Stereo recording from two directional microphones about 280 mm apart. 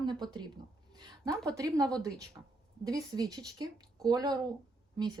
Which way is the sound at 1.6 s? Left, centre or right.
Centre.